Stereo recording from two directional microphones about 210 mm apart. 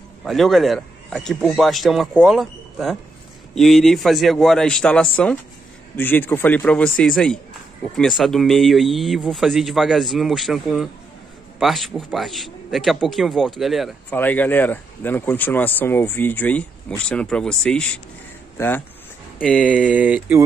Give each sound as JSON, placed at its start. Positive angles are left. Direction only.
{"t": 0.2, "sound": "speech", "side_deg": 0}
{"t": 19.7, "sound": "speech", "side_deg": -5}